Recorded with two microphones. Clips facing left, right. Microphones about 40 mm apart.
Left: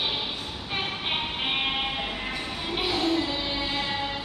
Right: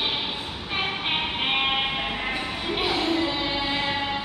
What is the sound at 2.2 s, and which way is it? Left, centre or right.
Music, right.